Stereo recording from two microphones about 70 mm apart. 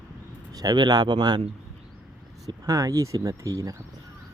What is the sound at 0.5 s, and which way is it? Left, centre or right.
Speech, right.